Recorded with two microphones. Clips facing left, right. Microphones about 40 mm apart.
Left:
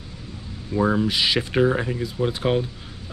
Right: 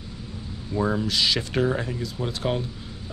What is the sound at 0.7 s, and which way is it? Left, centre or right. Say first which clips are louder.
Speech: left 3 dB; centre.